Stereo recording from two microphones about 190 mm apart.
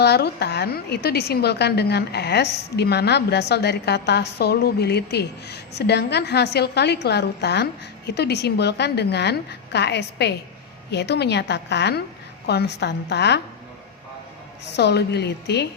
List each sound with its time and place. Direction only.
0.0 s a woman's voice: 60° left (ahead or behind)
14.6 s a woman's voice: 60° left (ahead or behind)